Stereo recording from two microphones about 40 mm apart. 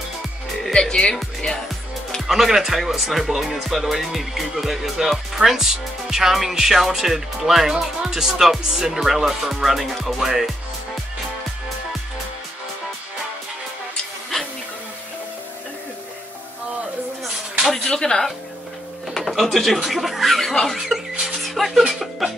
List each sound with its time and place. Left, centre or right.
0.7 s speech: centre
2.2 s speech: centre
17.8 s speech: centre